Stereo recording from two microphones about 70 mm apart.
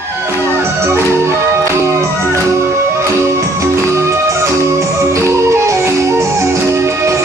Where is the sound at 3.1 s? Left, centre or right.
Right.